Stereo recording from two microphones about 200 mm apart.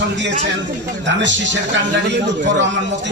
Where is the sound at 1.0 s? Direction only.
65° right (ahead or behind).